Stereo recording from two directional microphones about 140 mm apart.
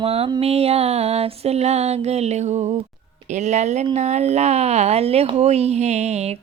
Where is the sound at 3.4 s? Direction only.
55° right (ahead or behind).